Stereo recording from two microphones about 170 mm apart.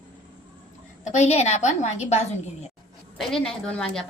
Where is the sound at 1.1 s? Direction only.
40° left (ahead or behind).